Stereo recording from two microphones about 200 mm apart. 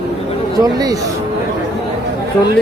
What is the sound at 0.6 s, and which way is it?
Speech, 20° right (ahead or behind).